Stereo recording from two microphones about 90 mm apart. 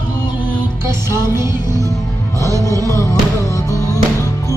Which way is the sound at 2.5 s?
35° left (ahead or behind).